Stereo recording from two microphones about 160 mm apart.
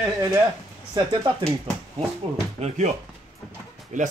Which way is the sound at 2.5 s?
45° right (ahead or behind).